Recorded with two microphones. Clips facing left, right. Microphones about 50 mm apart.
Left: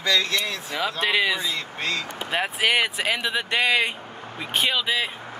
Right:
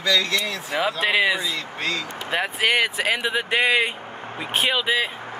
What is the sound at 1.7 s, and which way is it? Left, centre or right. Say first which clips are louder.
Speech: right 2 dB; left.